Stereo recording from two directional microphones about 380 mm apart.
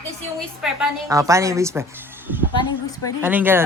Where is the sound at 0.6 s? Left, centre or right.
Centre.